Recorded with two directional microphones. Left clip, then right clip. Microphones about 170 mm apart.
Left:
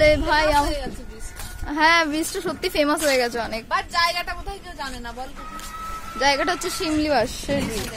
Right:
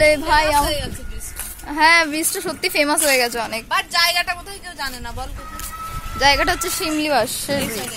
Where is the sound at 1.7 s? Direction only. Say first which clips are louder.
Right 3 dB; 10° left (ahead or behind).